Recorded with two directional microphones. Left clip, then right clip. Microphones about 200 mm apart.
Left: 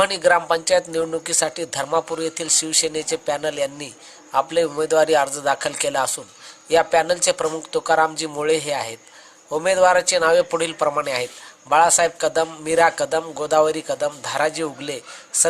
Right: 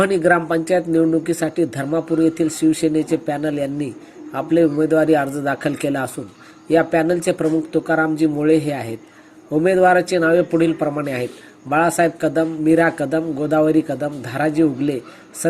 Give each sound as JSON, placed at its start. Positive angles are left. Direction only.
{"t": 0.0, "sound": "speech", "side_deg": 10}